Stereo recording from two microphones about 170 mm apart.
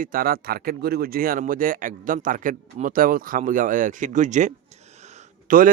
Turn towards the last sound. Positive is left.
turn(degrees=-50)  # may be behind; listen again after turning